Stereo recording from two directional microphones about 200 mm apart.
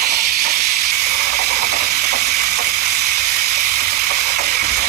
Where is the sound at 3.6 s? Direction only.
50° right (ahead or behind).